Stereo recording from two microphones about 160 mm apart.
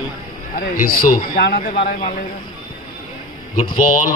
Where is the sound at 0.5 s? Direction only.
60° left (ahead or behind).